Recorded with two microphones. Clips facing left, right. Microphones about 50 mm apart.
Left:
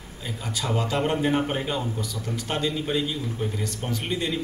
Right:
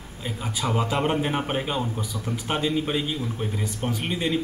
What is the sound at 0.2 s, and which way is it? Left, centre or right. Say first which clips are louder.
A man's voice: right 2 dB; centre.